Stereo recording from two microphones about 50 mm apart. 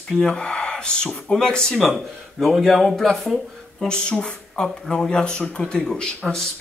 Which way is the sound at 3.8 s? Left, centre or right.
Centre.